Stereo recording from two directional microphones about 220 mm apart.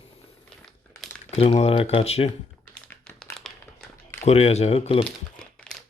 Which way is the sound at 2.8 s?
5° left (ahead or behind).